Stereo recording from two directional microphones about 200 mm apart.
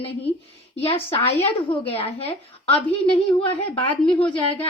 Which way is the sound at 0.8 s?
30° left (ahead or behind).